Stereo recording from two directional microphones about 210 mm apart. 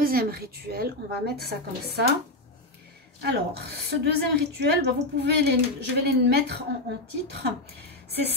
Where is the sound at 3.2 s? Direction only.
50° right (ahead or behind).